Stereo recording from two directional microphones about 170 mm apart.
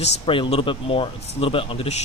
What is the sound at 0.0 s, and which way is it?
Speech, 30° left (ahead or behind).